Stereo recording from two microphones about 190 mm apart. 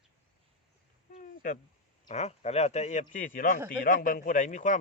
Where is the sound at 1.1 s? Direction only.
45° left (ahead or behind).